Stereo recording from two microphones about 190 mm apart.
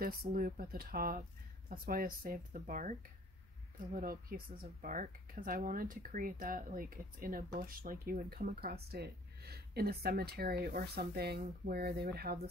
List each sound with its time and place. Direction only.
0.0 s speech: 55° right (ahead or behind)